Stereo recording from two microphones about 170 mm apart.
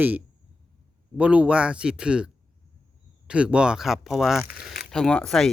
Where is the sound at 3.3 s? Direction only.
5° right (ahead or behind).